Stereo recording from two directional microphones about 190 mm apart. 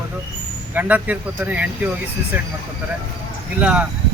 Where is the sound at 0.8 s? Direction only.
10° right (ahead or behind).